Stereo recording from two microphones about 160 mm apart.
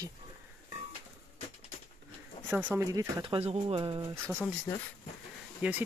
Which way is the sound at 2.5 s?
10° right (ahead or behind).